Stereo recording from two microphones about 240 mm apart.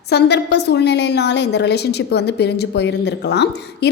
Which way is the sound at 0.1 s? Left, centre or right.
Left.